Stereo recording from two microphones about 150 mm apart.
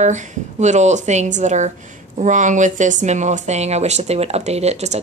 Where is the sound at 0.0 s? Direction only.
55° right (ahead or behind).